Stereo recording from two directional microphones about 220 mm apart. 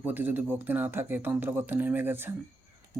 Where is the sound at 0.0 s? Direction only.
10° right (ahead or behind).